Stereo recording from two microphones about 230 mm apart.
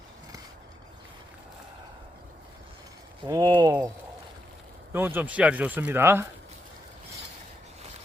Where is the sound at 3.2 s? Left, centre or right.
Centre.